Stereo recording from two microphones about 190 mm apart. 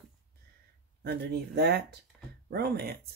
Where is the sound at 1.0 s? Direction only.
60° right (ahead or behind).